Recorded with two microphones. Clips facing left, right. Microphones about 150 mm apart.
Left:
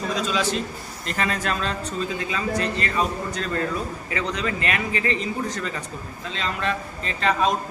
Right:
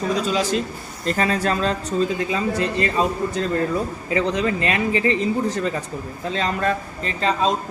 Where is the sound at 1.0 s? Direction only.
35° right (ahead or behind).